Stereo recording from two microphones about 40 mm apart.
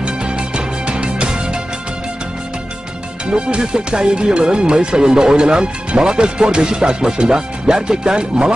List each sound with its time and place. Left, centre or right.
0.0 s music: right
3.3 s speech: right